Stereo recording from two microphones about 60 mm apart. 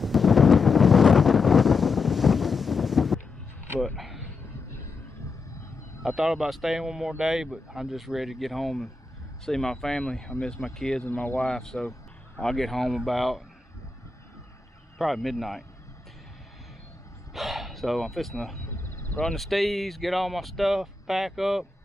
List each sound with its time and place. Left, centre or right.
0.0 s wind noise: centre
3.8 s a sound: centre
6.0 s speech: centre
15.0 s speech: centre
17.3 s speech: centre
18.7 s a sound: left
19.1 s speech: centre